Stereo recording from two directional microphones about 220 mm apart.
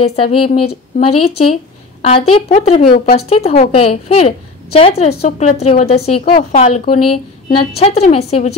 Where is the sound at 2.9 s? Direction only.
40° left (ahead or behind).